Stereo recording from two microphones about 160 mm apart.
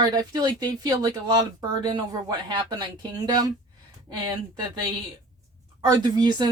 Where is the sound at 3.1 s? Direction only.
25° right (ahead or behind).